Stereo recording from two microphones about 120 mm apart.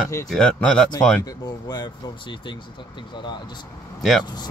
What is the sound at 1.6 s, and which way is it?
Speech, 35° left (ahead or behind).